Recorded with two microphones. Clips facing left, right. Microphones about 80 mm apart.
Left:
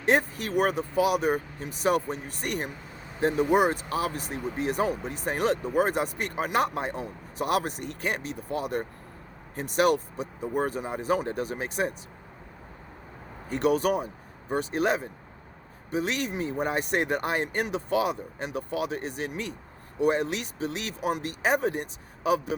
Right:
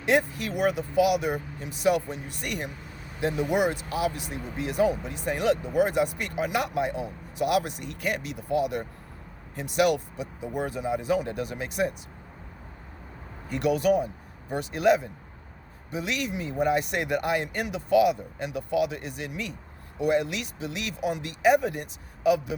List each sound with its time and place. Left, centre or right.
0.0 s speech: left
13.5 s speech: left